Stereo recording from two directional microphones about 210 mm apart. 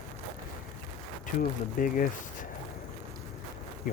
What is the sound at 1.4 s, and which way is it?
Speech, 40° left (ahead or behind).